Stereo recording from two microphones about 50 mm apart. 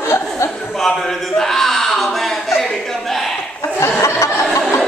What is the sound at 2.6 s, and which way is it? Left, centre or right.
Chuckle, centre.